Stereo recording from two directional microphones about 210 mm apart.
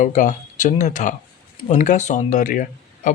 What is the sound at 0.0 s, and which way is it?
Speech, 35° left (ahead or behind).